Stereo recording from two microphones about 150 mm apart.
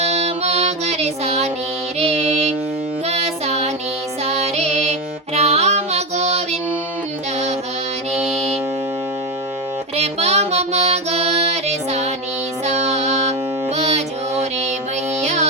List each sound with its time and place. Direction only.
0.0 s music: 45° right (ahead or behind)
9.9 s music: 45° right (ahead or behind)